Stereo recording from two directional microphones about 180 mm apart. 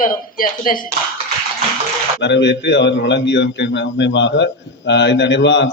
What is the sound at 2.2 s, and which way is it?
A man's voice, 80° left.